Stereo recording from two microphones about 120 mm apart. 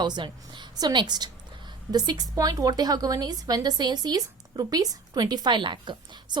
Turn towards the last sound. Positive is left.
turn(degrees=-40)  # may be behind; listen again after turning